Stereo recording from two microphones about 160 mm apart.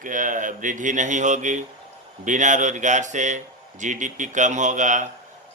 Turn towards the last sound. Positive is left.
turn(degrees=-50)  # may be behind; listen again after turning